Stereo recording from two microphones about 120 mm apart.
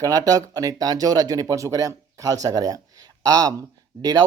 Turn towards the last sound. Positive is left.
turn(degrees=-30)  # may be behind; listen again after turning